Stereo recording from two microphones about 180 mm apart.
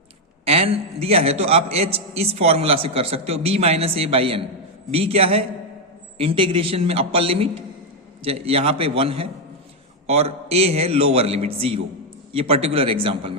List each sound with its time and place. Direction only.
0.4 s a man's voice: 35° right (ahead or behind)